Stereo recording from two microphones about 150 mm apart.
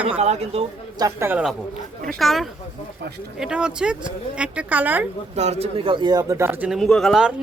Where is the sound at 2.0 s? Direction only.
Centre (ahead or behind).